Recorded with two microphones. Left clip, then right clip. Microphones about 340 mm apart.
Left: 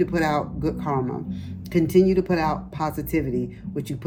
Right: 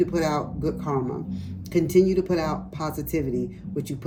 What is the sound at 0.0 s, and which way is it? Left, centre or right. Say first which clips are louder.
Speech: left 1 dB; centre.